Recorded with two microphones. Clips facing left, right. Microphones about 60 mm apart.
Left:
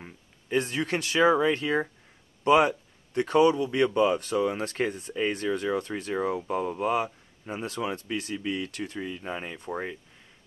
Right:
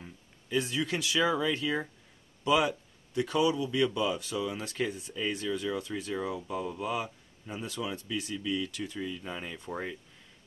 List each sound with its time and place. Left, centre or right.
0.0 s speech: left
8.9 s speech: left; by 9.9 s centre